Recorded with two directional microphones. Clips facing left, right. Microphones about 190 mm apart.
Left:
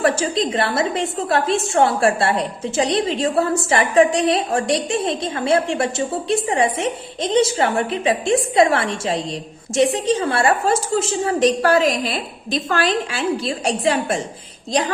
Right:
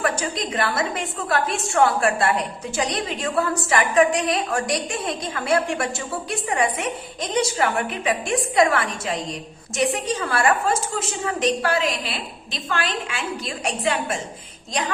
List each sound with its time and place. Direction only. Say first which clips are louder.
0.0 s a woman's voice: left 6 dB; 30° left (ahead or behind)